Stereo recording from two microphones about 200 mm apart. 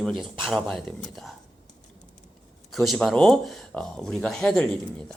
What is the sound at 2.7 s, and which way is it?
Speech, centre (ahead or behind).